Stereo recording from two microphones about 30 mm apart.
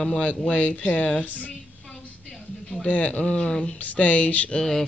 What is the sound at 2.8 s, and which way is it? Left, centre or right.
Speech, left.